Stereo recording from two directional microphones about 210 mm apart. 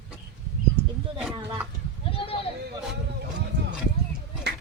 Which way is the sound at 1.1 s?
5° right (ahead or behind).